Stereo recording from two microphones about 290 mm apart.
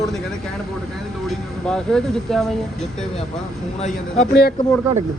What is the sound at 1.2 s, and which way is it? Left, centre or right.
Speech, centre.